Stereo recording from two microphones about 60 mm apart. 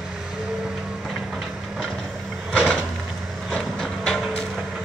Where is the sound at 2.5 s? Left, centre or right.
Centre.